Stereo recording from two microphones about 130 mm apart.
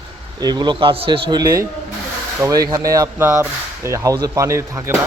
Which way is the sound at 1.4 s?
25° right (ahead or behind).